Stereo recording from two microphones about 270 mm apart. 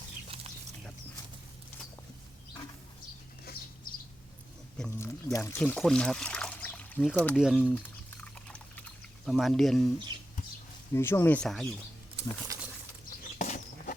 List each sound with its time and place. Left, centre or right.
4.8 s speech: centre
10.9 s speech: centre
13.4 s bird flight: left